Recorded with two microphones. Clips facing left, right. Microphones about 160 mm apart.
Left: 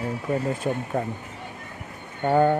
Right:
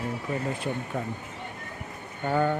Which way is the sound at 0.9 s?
40° left (ahead or behind).